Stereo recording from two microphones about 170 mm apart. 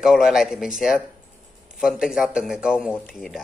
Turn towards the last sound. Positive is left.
turn(degrees=0)  # may be behind; listen again after turning